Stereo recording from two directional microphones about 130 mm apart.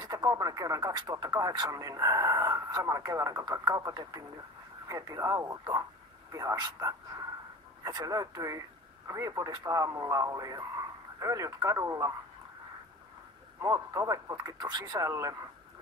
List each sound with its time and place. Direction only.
0.0 s speech: 30° right (ahead or behind)
13.6 s speech: 25° right (ahead or behind)